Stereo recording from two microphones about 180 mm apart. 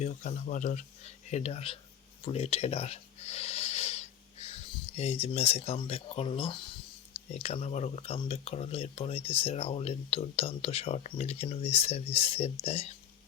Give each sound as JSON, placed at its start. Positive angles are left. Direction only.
{"t": 0.0, "sound": "speech", "side_deg": 40}